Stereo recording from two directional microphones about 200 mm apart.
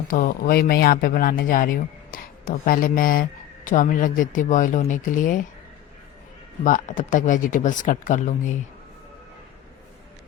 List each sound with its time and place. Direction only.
0.1 s speech: 45° left (ahead or behind)
6.7 s speech: 40° left (ahead or behind)